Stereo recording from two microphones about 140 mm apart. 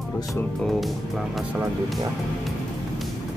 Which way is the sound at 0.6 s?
Centre (ahead or behind).